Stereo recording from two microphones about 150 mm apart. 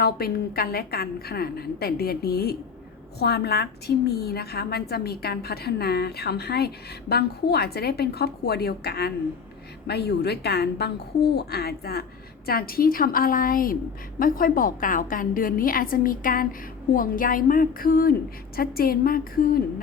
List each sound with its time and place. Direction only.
0.0 s a woman's voice: 90° left